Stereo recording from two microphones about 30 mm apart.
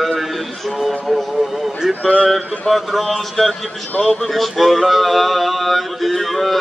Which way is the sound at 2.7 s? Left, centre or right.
Centre.